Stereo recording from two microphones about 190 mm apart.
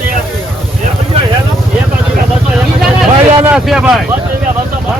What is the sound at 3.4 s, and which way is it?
Speech, 5° right (ahead or behind).